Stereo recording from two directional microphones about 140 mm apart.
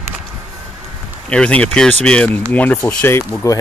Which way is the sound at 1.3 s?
10° left (ahead or behind).